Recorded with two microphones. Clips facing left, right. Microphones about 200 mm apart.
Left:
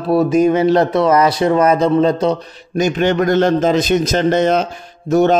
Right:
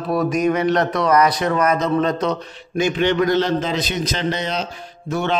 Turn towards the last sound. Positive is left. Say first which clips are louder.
# left 10 dB
turn(degrees=45)  # may be behind; listen again after turning